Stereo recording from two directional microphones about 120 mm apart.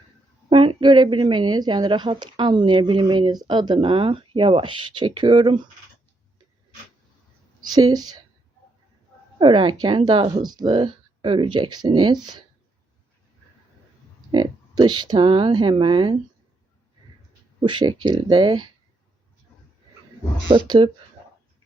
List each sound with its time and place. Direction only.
0.5 s speech: 45° right (ahead or behind)
7.7 s speech: 35° right (ahead or behind)
9.4 s speech: 45° right (ahead or behind)
14.3 s speech: 40° right (ahead or behind)
17.6 s speech: 40° right (ahead or behind)
20.5 s speech: 45° right (ahead or behind)